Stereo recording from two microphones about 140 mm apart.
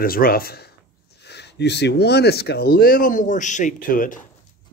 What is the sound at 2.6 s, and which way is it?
Speech, 90° left.